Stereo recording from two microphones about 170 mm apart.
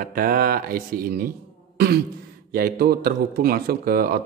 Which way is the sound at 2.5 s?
60° right (ahead or behind).